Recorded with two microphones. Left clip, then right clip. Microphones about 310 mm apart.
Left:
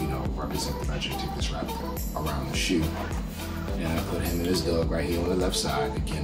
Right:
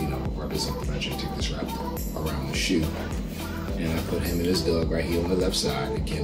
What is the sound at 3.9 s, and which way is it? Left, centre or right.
Speech, centre.